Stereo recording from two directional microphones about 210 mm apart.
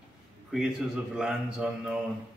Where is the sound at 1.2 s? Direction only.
5° right (ahead or behind).